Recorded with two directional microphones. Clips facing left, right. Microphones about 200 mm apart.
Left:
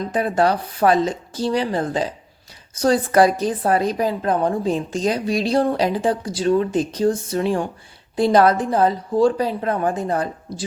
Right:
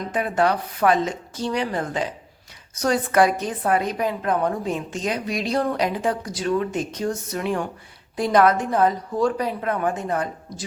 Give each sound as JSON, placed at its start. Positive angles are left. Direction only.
{"t": 0.1, "sound": "a woman's voice", "side_deg": 35}